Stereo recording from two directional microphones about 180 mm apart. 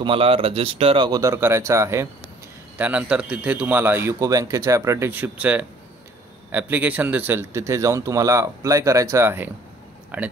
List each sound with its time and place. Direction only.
0.0 s speech: 30° right (ahead or behind); by 10.3 s 10° right (ahead or behind)